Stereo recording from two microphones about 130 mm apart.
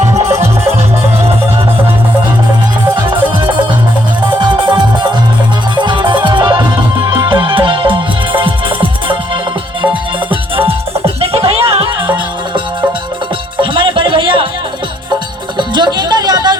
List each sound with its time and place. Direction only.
0.3 s music: 20° right (ahead or behind)
2.9 s music: 40° right (ahead or behind)
10.5 s music: 45° right (ahead or behind)
15.5 s music: 35° right (ahead or behind)